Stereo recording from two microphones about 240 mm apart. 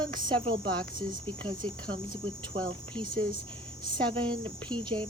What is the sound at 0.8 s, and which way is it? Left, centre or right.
Cricket, centre.